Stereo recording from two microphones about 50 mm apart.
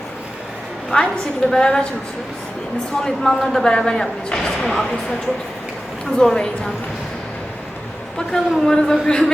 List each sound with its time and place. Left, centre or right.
0.9 s a woman's voice: left
1.5 s speech: centre
3.0 s speech: centre
6.1 s speech: centre
8.3 s speech: centre